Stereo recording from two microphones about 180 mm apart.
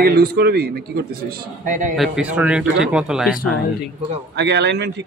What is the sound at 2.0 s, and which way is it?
A man's voice, 5° right (ahead or behind).